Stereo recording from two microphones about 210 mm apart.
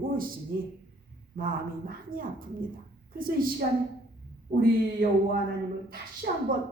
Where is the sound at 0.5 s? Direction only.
45° right (ahead or behind).